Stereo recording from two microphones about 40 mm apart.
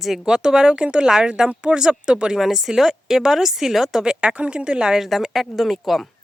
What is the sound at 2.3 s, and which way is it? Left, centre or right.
Speech, centre.